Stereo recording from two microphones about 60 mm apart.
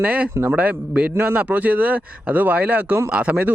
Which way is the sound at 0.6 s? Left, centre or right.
Right.